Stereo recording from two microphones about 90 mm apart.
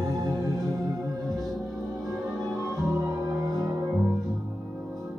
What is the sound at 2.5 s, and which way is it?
Music, 35° right (ahead or behind).